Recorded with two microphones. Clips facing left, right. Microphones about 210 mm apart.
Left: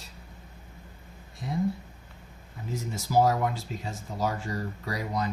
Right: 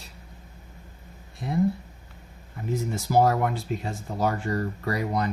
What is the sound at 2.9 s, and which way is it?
Speech, 60° right (ahead or behind).